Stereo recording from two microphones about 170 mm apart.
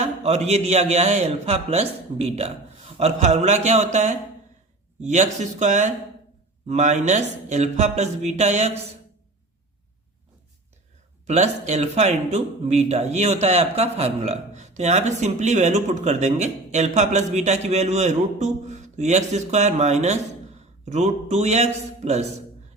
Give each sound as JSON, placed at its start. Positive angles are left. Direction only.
{"t": 0.0, "sound": "a man's voice", "side_deg": -40}
{"t": 11.3, "sound": "speech", "side_deg": -40}